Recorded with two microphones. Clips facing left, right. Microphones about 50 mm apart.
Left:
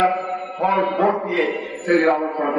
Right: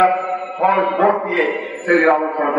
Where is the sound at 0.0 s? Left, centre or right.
Right.